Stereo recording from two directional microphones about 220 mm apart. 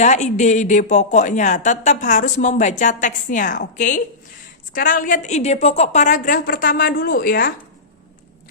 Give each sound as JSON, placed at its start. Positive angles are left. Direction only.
{"t": 0.0, "sound": "speech", "side_deg": 30}